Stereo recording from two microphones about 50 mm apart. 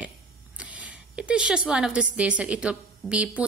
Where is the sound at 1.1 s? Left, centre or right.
Right.